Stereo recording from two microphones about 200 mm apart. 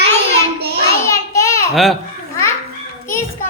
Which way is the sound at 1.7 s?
Centre (ahead or behind).